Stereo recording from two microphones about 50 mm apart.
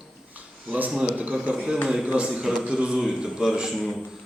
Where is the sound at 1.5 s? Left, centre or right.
Right.